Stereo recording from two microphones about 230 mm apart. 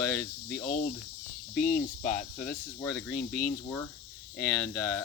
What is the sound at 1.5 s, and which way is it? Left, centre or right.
Speech, left.